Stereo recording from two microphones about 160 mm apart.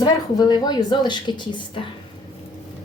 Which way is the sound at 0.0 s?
25° left (ahead or behind).